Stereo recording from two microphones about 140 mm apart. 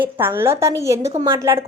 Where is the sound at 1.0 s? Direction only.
50° right (ahead or behind).